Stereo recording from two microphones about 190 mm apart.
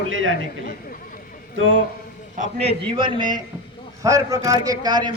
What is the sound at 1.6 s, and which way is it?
Speech, 90° right.